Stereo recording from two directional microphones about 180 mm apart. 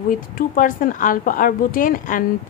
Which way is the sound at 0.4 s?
50° left (ahead or behind).